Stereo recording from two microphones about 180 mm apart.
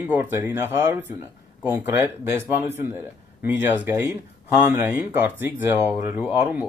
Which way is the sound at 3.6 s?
10° right (ahead or behind).